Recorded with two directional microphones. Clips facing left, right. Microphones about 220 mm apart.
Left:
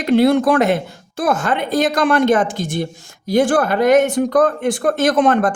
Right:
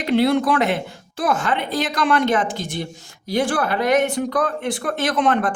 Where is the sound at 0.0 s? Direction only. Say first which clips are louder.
Left 4 dB; 45° left (ahead or behind).